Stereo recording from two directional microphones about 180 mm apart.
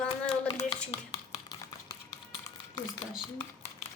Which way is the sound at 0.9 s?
30° left (ahead or behind).